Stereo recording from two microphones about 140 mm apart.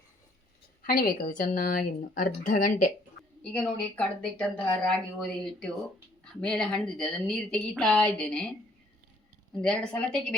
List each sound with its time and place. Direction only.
0.8 s a woman's voice: 90° left; by 2.9 s 70° left (ahead or behind)
3.5 s a woman's voice: 5° left (ahead or behind)
9.6 s speech: 5° left (ahead or behind)